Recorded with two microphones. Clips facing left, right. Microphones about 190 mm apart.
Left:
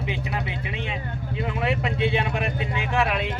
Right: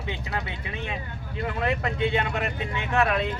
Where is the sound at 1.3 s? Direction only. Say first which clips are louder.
Left 1 dB; 15° left (ahead or behind).